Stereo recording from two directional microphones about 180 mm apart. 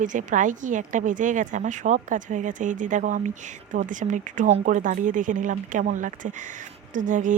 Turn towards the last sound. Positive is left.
turn(degrees=-45)  # may be behind; listen again after turning